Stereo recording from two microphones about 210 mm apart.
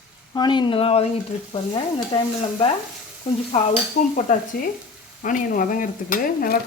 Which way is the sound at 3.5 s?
40° left (ahead or behind).